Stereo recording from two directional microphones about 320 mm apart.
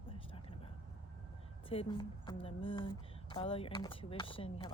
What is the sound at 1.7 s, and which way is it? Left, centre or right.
Speech, centre.